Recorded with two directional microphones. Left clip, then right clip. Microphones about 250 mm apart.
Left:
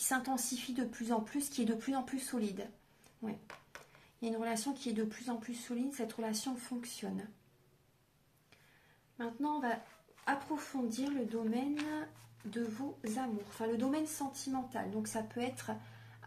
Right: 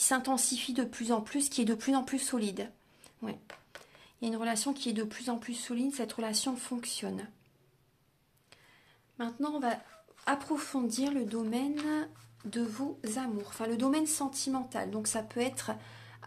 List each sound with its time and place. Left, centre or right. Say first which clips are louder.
0.1 s speech: right 2 dB; right
4.2 s speech: right 4 dB; right
9.2 s speech: right 3 dB; right